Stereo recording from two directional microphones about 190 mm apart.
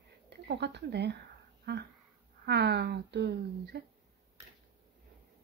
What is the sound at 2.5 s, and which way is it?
Speech, 60° right (ahead or behind).